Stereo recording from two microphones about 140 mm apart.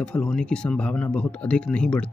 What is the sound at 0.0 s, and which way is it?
Speech, 5° left (ahead or behind).